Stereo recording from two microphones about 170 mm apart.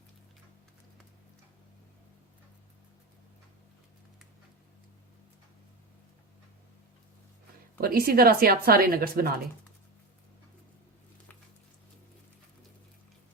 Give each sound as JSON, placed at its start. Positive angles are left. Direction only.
{"t": 7.8, "sound": "a woman's voice", "side_deg": -60}